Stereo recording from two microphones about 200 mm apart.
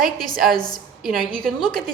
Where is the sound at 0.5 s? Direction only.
20° left (ahead or behind).